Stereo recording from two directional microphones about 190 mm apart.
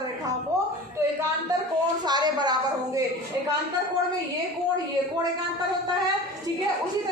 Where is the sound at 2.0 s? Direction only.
20° right (ahead or behind).